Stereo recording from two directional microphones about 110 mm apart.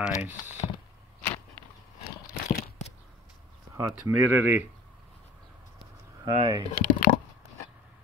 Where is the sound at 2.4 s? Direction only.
90° left.